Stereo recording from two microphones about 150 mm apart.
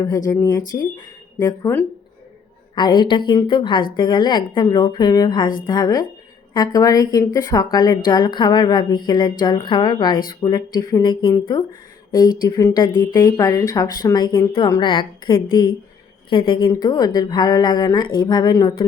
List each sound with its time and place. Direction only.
0.3 s a woman's voice: 25° left (ahead or behind)